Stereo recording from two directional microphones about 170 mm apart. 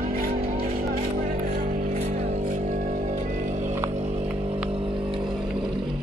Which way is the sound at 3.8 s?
40° right (ahead or behind).